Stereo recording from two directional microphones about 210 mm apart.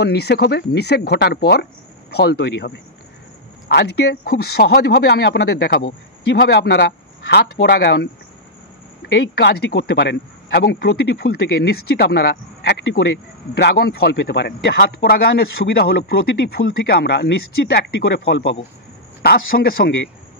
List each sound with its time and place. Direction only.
0.0 s a man's voice: 50° left (ahead or behind)
9.1 s a man's voice: 55° left (ahead or behind)